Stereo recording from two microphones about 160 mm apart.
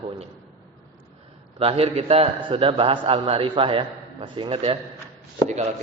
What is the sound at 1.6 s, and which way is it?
A man's voice, 40° right (ahead or behind).